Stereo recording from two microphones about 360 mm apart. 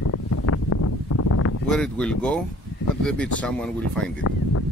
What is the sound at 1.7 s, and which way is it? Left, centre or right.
Speech, centre.